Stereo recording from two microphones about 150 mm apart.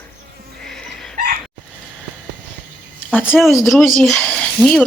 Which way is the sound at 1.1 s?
65° right (ahead or behind).